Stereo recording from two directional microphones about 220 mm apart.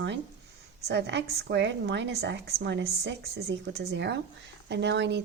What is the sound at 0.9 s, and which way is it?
A woman's voice, 50° right (ahead or behind).